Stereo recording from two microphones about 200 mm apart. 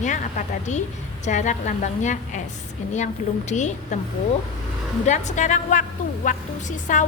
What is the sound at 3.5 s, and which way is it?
Speech, 35° left (ahead or behind).